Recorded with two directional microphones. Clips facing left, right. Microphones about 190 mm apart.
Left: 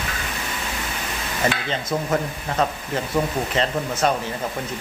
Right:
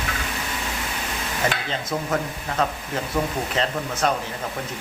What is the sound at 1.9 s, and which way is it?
Speech, 15° left (ahead or behind).